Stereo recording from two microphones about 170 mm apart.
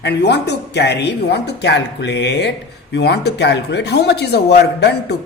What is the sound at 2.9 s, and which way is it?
Speech, 75° left (ahead or behind).